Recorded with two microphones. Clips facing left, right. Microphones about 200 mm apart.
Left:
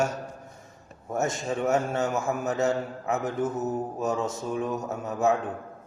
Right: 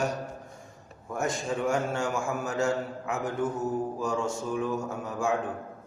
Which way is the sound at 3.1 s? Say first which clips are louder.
Left 2 dB; 5° left (ahead or behind).